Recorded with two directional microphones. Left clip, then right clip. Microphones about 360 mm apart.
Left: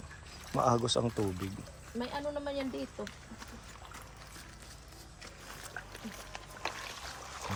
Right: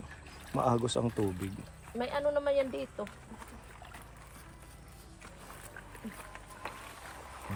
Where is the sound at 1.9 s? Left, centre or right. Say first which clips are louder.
Right 6 dB; right.